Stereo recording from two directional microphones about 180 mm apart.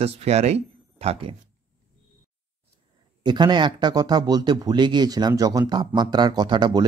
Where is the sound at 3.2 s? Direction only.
25° right (ahead or behind).